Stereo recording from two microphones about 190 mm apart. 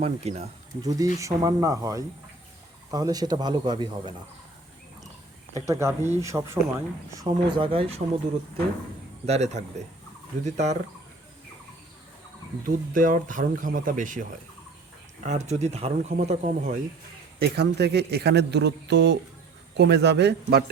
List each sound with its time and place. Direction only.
0.0 s speech: 35° right (ahead or behind)
0.8 s speech: 20° right (ahead or behind)
5.5 s speech: 15° right (ahead or behind)
9.2 s speech: 35° right (ahead or behind)
12.6 s speech: 45° right (ahead or behind)
17.4 s a man's voice: 60° right (ahead or behind)